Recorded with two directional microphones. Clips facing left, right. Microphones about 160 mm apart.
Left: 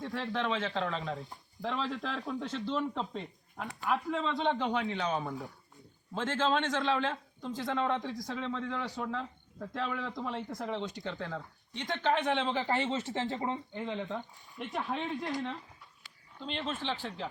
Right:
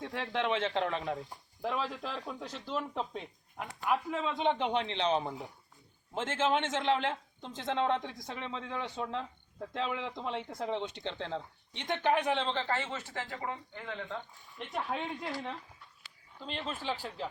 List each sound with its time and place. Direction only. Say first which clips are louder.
0.1 s a man's voice: right 1 dB; 20° right (ahead or behind)
4.4 s a man's voice: right 3 dB; 20° right (ahead or behind); by 14.2 s 20° left (ahead or behind)
14.6 s a man's voice: left 1 dB; 5° right (ahead or behind)
16.4 s a man's voice: left 2 dB; 5° right (ahead or behind)